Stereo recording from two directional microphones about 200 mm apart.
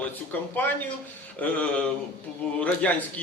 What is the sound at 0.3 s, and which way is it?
A man's voice, 10° left (ahead or behind).